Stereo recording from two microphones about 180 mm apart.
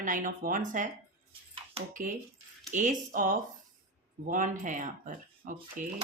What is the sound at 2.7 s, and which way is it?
A woman's voice, 45° right (ahead or behind).